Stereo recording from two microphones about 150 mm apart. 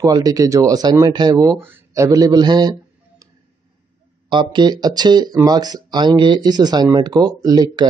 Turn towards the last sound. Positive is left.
turn(degrees=-30)  # may be behind; listen again after turning